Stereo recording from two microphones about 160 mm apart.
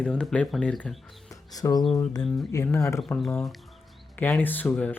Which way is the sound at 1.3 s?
20° left (ahead or behind).